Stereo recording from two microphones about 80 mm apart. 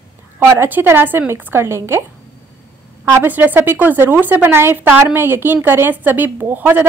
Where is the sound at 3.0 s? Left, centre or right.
Right.